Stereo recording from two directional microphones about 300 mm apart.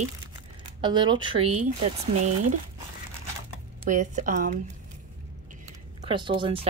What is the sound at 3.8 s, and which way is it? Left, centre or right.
Speech, right.